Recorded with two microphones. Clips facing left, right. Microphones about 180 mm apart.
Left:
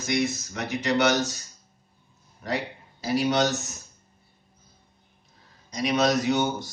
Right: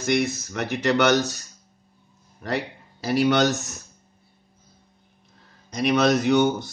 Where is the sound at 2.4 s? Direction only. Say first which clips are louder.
Right 2 dB; 65° right (ahead or behind).